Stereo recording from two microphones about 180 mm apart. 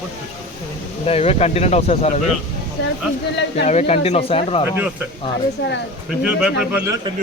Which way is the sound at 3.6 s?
35° left (ahead or behind).